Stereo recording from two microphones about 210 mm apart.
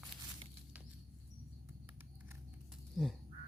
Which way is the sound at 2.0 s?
10° right (ahead or behind).